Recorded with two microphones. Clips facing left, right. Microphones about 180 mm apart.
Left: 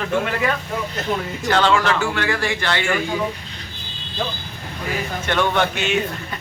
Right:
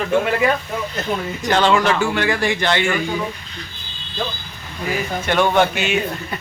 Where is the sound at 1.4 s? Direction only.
15° right (ahead or behind).